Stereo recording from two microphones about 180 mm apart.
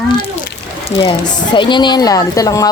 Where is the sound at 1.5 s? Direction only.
25° left (ahead or behind).